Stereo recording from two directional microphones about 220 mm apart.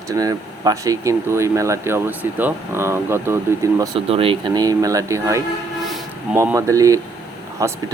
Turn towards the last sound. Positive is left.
turn(degrees=-15)  # may be behind; listen again after turning